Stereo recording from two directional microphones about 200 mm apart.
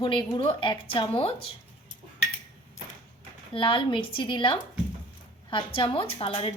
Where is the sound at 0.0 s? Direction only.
20° left (ahead or behind).